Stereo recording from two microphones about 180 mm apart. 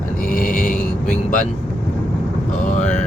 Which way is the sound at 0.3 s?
50° left (ahead or behind).